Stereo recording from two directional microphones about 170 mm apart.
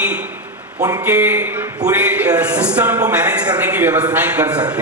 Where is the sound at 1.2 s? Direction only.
10° right (ahead or behind).